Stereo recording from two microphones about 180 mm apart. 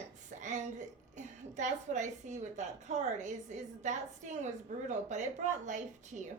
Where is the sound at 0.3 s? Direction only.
40° right (ahead or behind).